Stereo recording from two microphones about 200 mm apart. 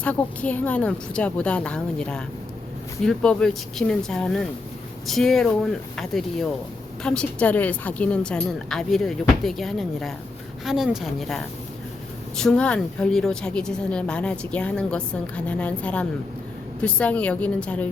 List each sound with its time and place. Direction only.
0.0 s a woman's voice: 5° left (ahead or behind)